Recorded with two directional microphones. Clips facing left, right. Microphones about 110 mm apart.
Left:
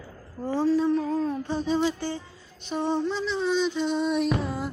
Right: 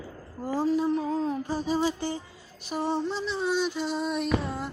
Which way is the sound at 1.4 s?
5° right (ahead or behind).